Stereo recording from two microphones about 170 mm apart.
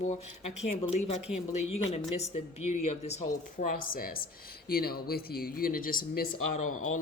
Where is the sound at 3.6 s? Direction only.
55° left (ahead or behind).